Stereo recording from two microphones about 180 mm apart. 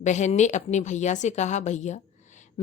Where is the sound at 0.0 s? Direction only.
40° left (ahead or behind).